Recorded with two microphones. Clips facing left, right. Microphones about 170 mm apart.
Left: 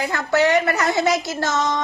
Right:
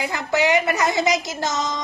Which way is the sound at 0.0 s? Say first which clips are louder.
Left 2 dB; 15° right (ahead or behind).